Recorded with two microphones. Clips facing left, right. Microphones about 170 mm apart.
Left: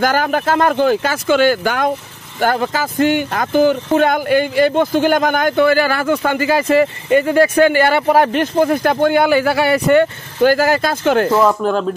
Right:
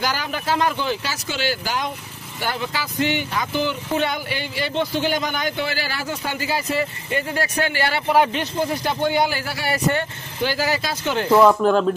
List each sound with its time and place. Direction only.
0.0 s speech: 50° left (ahead or behind)
7.2 s speech: 75° left (ahead or behind)
7.5 s speech: 50° left (ahead or behind)
11.2 s speech: centre (ahead or behind)